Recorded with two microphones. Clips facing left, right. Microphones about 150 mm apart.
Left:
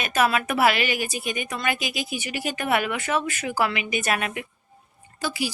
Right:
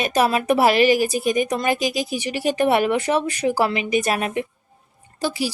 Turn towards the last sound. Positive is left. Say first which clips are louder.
# right 4 dB
turn(degrees=-35)  # may be behind; listen again after turning